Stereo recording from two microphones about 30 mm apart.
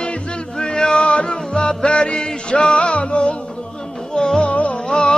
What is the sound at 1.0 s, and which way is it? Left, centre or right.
Music, left.